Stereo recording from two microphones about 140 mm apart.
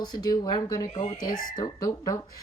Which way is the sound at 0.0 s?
30° left (ahead or behind).